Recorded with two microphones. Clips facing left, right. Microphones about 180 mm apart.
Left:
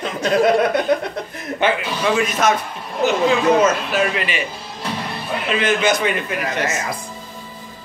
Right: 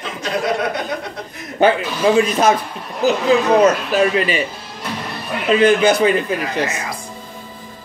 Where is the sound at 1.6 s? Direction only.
35° right (ahead or behind).